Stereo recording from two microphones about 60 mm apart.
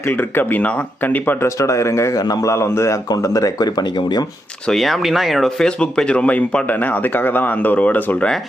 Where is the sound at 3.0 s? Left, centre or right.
Left.